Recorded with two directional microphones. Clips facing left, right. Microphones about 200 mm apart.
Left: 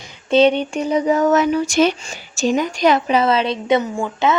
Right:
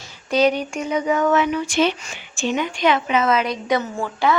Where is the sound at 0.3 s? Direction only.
25° left (ahead or behind).